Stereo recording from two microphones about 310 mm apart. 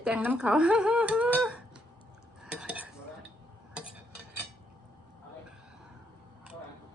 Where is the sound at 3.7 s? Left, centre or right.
Centre.